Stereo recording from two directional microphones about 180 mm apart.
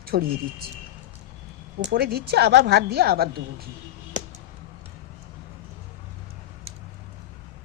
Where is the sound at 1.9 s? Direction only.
65° right (ahead or behind).